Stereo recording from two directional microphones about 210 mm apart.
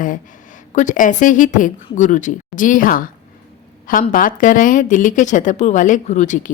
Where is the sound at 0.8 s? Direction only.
40° left (ahead or behind).